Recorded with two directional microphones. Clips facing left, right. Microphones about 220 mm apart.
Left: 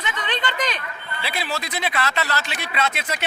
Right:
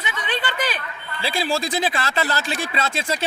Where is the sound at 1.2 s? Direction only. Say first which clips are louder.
Right 5 dB; 30° right (ahead or behind).